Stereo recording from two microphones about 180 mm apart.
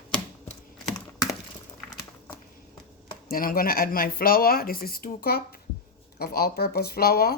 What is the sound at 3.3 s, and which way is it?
Speech, 55° left (ahead or behind).